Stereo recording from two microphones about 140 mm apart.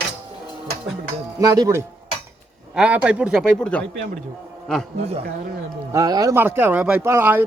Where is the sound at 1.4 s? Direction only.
25° right (ahead or behind).